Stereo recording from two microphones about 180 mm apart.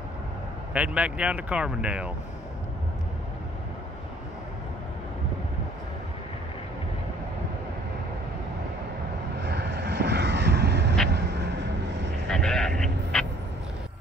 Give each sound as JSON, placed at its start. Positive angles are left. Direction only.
{"t": 0.7, "sound": "speech", "side_deg": -5}
{"t": 9.5, "sound": "vehicle", "side_deg": -65}
{"t": 12.3, "sound": "a sound", "side_deg": 5}